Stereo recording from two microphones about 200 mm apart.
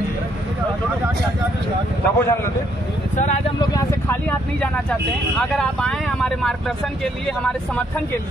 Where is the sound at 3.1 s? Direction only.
35° left (ahead or behind).